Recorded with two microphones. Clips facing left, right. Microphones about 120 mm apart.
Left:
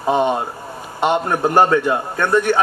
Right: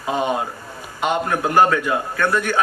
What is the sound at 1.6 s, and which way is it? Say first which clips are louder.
Speech: left 3 dB; 25° left (ahead or behind).